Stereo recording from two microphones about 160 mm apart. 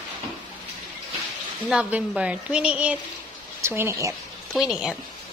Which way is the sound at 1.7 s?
10° right (ahead or behind).